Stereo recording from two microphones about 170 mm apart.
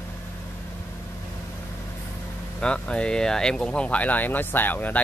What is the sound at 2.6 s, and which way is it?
Speech, 5° left (ahead or behind).